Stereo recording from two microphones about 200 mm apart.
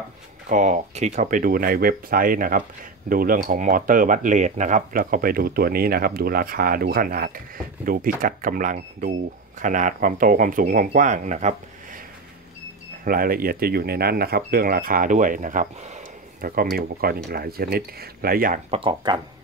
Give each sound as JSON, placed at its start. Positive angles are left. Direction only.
{"t": 0.5, "sound": "speech", "side_deg": -40}
{"t": 13.0, "sound": "speech", "side_deg": -45}
{"t": 18.7, "sound": "speech", "side_deg": -25}